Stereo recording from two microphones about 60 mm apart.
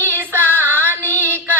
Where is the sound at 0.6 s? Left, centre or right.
Right.